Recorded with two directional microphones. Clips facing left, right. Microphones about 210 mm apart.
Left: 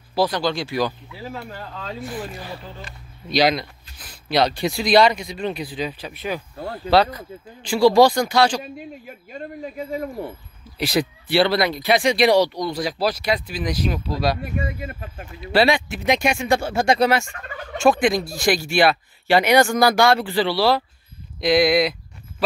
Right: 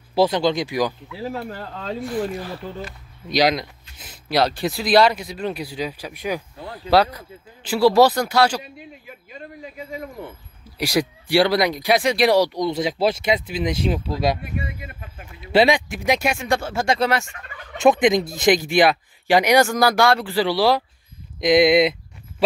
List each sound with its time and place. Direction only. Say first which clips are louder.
0.1 s speech: right 3 dB; 20° right (ahead or behind)
1.3 s speech: right 3 dB; 35° right (ahead or behind)
2.4 s speech: right 4 dB; centre (ahead or behind)
3.3 s speech: even; 15° right (ahead or behind)
9.0 s speech: left 4 dB; 45° left (ahead or behind)
10.8 s speech: even; 10° right (ahead or behind)
12.5 s speech: right 3 dB; 20° right (ahead or behind)
14.4 s speech: left 3 dB; 45° left (ahead or behind)
15.4 s speech: right 1 dB; 20° right (ahead or behind); by 16.6 s centre (ahead or behind)
16.6 s speech: left 4 dB; 15° left (ahead or behind)
17.7 s speech: right 2 dB; 20° right (ahead or behind); by 20.4 s centre (ahead or behind)
20.4 s speech: right 2 dB; 15° right (ahead or behind)